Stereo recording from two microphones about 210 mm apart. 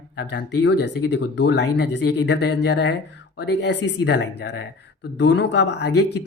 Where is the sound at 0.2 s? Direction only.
55° left (ahead or behind).